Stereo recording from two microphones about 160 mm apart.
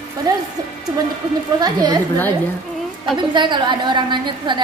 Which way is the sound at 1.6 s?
25° right (ahead or behind).